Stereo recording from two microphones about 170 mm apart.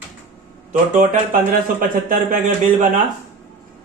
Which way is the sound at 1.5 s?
50° right (ahead or behind).